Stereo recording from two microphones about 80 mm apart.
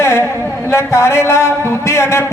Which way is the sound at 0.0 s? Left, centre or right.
Left.